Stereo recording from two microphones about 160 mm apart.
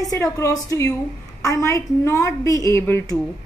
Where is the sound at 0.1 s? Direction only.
20° left (ahead or behind).